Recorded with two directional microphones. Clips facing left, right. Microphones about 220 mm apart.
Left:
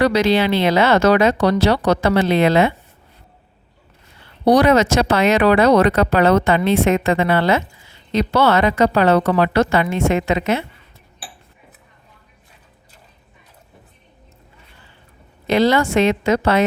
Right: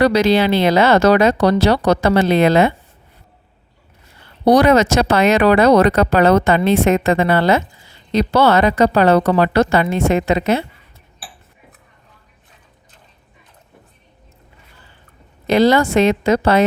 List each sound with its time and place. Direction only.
0.0 s speech: 35° right (ahead or behind)
4.4 s speech: 45° right (ahead or behind)
15.4 s speech: 40° right (ahead or behind)